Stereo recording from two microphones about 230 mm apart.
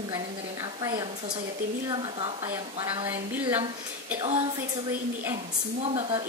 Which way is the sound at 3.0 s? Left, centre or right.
Centre.